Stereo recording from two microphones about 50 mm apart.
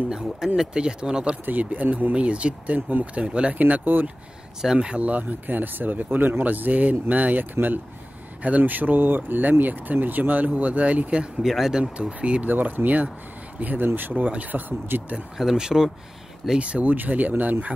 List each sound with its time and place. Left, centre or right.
0.1 s speech: centre
1.4 s speech: right
3.5 s speech: right
4.6 s speech: centre
11.4 s speech: centre
11.8 s speech: right
12.4 s speech: right
15.3 s speech: centre
16.5 s speech: right